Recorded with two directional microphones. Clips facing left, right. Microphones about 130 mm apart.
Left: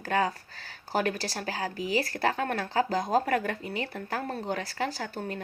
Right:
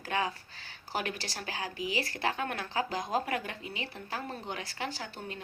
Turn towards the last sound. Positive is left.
turn(degrees=45)  # may be behind; listen again after turning